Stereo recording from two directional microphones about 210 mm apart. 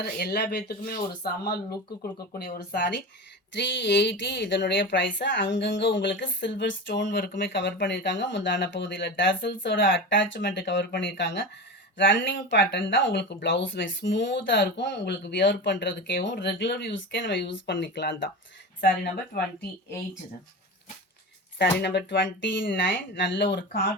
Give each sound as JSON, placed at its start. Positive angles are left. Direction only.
{"t": 0.0, "sound": "speech", "side_deg": 50}
{"t": 2.7, "sound": "speech", "side_deg": 55}
{"t": 21.6, "sound": "speech", "side_deg": 55}